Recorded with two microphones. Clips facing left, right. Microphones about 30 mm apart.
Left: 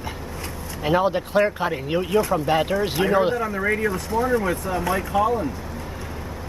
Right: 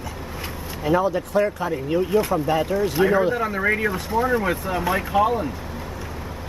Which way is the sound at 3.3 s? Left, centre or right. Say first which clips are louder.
Right 1 dB; right.